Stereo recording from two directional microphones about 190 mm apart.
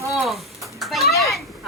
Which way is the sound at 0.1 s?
Centre (ahead or behind).